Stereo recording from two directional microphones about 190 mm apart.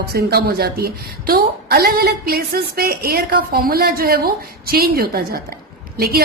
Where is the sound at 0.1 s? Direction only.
55° right (ahead or behind).